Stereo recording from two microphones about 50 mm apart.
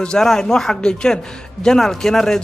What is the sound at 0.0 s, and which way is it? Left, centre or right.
Speech, centre.